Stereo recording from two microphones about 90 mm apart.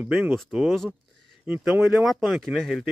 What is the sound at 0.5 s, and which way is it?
Speech, centre (ahead or behind).